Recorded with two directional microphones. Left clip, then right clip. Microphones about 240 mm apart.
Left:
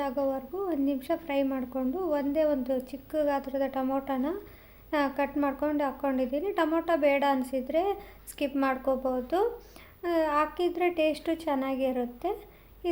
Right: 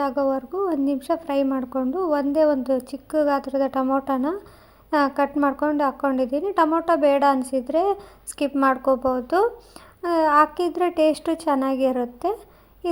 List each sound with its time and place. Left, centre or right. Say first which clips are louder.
0.0 s a woman's voice: right 7 dB; right